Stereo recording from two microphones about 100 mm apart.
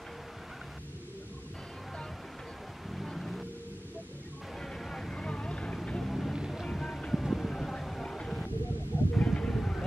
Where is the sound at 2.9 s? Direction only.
Centre (ahead or behind).